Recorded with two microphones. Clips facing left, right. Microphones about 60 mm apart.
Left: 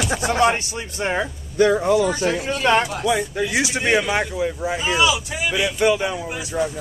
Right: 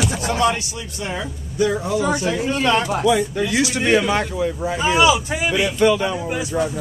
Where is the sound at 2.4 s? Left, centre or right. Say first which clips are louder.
Right 3 dB; right.